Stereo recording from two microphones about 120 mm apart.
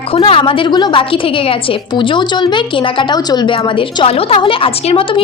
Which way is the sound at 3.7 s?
50° left (ahead or behind).